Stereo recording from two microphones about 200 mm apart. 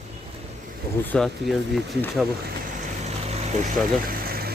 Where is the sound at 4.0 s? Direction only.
45° right (ahead or behind).